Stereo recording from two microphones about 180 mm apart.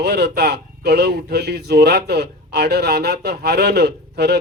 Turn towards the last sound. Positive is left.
turn(degrees=-65)  # may be behind; listen again after turning